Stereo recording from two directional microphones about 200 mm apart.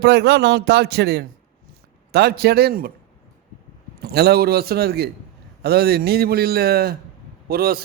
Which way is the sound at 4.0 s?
50° right (ahead or behind).